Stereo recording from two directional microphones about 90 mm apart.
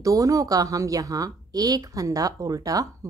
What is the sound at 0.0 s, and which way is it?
A woman's voice, 40° right (ahead or behind).